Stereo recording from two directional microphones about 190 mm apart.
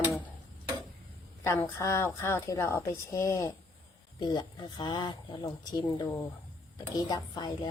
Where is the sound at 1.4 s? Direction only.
15° left (ahead or behind).